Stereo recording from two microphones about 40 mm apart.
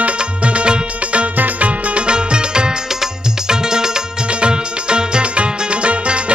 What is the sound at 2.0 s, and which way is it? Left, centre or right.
Music, right.